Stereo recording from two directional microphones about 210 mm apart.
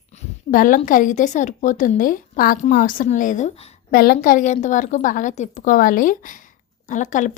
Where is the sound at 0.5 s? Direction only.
40° left (ahead or behind).